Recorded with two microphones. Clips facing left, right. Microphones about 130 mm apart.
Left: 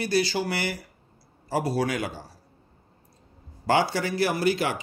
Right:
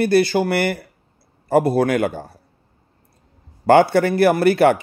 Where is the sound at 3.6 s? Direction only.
55° right (ahead or behind).